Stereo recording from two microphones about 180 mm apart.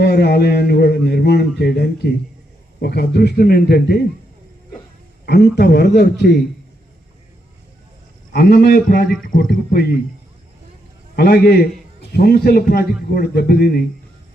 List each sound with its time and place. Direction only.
0.0 s a man's voice: 65° left (ahead or behind)
5.2 s a man's voice: 70° left (ahead or behind)
8.3 s a man's voice: 60° left (ahead or behind)
11.2 s a man's voice: 60° left (ahead or behind)